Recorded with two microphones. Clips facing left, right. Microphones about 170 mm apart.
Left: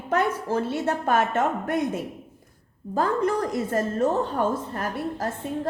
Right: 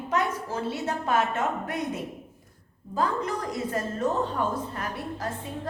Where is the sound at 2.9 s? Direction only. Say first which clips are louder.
Left 5 dB; 50° left (ahead or behind).